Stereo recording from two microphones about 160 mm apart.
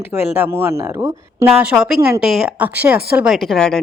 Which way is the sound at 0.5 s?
15° right (ahead or behind).